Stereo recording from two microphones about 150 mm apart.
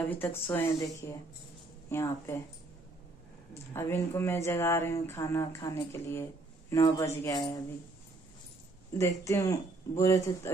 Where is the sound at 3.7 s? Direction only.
15° left (ahead or behind).